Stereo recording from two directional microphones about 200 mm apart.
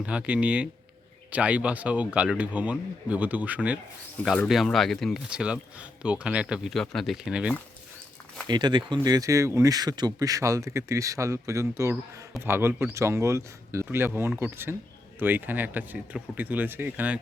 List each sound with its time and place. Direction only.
0.0 s speech: 5° right (ahead or behind)
8.4 s speech: 20° right (ahead or behind)